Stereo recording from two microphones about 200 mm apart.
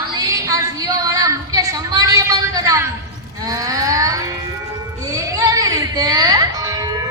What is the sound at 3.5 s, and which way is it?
Music, 15° right (ahead or behind).